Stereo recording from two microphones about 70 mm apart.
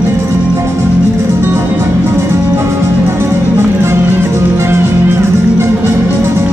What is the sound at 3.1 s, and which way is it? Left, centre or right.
Music, right.